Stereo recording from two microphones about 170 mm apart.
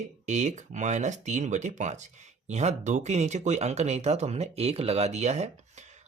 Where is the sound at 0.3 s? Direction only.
45° right (ahead or behind).